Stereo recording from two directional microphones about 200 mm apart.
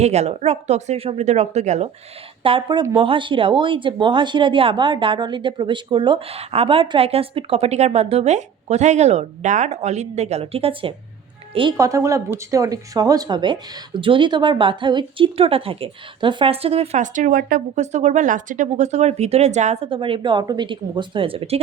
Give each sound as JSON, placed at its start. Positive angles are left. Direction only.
{"t": 0.0, "sound": "a woman's voice", "side_deg": -35}